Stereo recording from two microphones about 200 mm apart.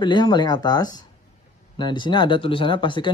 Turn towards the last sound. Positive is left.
turn(degrees=25)  # may be behind; listen again after turning